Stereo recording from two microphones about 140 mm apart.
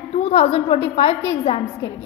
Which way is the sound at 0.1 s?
50° left (ahead or behind).